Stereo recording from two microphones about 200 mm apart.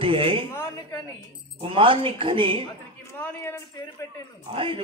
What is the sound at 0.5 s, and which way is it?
Speech, 10° left (ahead or behind).